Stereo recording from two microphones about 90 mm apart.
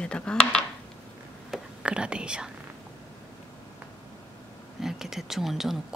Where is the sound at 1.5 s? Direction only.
10° right (ahead or behind).